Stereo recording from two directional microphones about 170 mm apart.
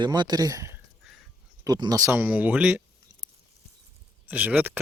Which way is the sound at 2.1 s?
10° right (ahead or behind).